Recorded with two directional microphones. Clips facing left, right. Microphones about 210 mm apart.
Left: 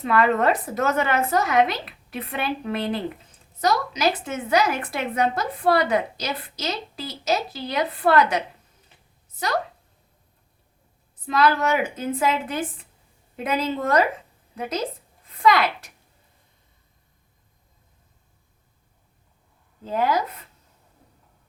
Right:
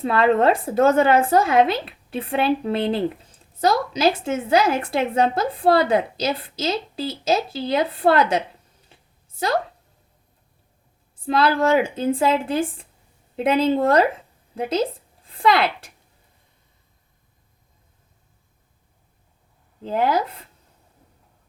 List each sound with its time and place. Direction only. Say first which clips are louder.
0.0 s a woman's voice: right 3 dB; 30° right (ahead or behind)
8.9 s a sound: right 7 dB; 30° right (ahead or behind)
11.3 s a woman's voice: right 3 dB; 30° right (ahead or behind)
19.8 s a woman's voice: right 2 dB; 25° right (ahead or behind)